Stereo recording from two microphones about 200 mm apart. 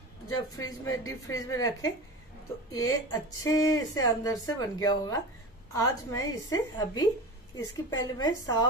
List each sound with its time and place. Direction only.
0.6 s a woman's voice: 20° left (ahead or behind)